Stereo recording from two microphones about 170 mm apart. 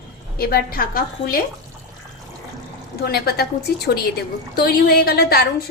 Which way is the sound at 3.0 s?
70° left (ahead or behind).